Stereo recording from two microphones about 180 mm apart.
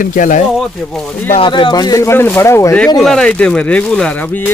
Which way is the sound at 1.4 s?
25° left (ahead or behind).